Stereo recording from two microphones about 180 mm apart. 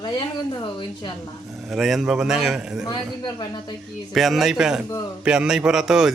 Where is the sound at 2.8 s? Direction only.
25° left (ahead or behind).